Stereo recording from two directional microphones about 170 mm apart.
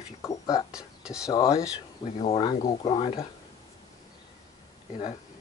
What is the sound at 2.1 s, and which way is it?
Speech, 35° left (ahead or behind).